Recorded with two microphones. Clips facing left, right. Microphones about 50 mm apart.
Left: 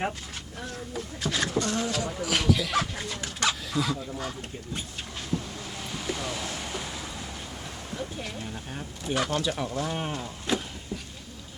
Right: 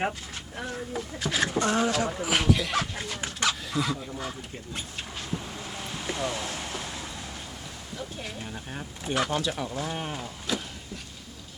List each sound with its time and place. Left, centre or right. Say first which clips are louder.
0.6 s speech: right 3 dB; centre
1.5 s speech: right 3 dB; right
2.0 s speech: right 1 dB; centre
5.3 s a sound: left 4 dB; centre
8.2 s speech: left 1 dB; centre
9.4 s speech: left 1 dB; centre